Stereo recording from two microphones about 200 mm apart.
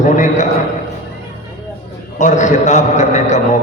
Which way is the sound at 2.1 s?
35° left (ahead or behind).